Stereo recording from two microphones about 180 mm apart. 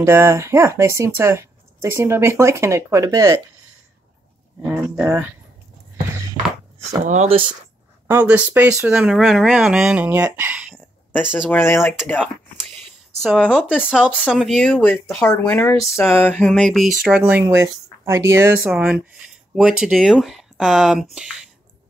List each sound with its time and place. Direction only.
0.0 s speech: 15° right (ahead or behind)
4.6 s speech: 10° right (ahead or behind)
7.1 s speech: 35° right (ahead or behind)
8.1 s speech: 10° right (ahead or behind)
13.4 s speech: 5° left (ahead or behind); by 18.5 s 15° right (ahead or behind)
18.6 s speech: 5° right (ahead or behind)